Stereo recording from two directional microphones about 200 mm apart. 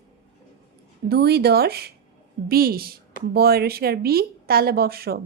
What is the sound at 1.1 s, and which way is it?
Speech, 55° right (ahead or behind).